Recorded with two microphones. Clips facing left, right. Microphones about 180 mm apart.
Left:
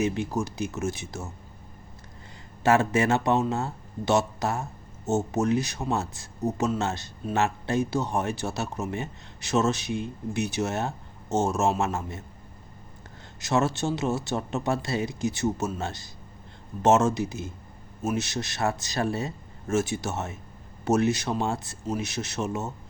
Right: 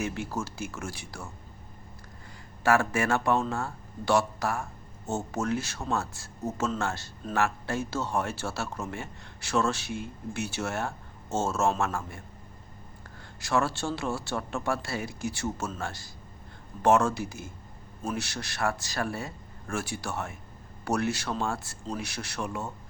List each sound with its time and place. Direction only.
0.0 s speech: 20° left (ahead or behind)
2.6 s speech: 20° left (ahead or behind)
13.4 s speech: 20° left (ahead or behind)